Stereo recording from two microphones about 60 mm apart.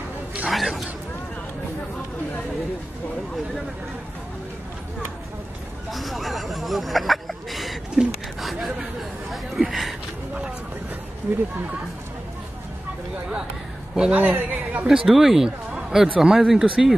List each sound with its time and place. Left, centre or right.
0.5 s speech: centre
5.9 s a sound: centre
11.3 s speech: right
14.1 s a man's voice: right
14.9 s speech: centre